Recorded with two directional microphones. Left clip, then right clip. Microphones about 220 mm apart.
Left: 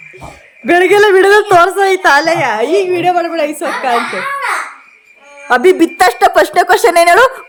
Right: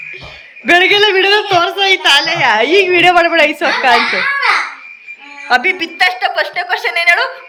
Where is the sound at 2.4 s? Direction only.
10° left (ahead or behind).